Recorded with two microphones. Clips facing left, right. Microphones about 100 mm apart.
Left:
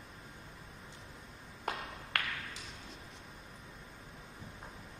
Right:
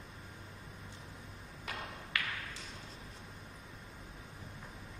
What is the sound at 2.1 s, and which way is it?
Tap, 55° left (ahead or behind).